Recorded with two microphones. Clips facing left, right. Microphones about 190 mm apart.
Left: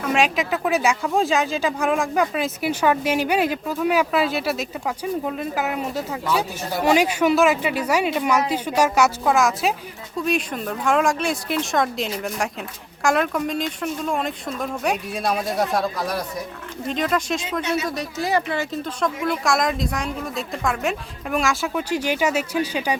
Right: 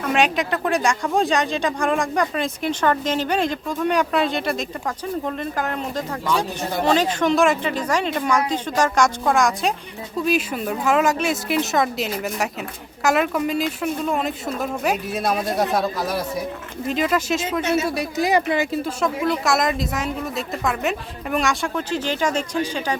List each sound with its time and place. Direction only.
0.0 s speech: centre (ahead or behind)